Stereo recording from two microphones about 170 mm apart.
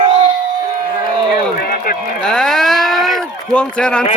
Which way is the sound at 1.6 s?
65° left (ahead or behind).